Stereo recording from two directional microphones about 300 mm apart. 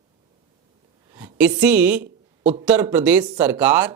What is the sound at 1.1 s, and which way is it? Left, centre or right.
Speech, centre.